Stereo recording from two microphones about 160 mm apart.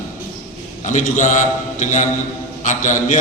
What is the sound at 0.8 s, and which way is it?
A man's voice, 50° left (ahead or behind).